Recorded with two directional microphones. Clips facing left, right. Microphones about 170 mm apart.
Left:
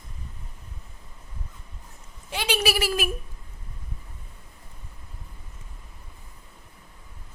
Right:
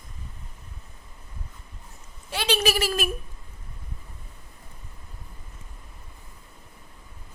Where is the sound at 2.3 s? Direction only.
15° left (ahead or behind).